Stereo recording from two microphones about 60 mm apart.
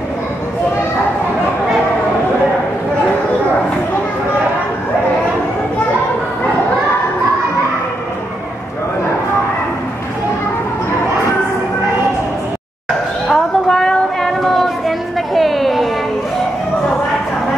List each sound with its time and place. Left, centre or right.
13.3 s child singing: centre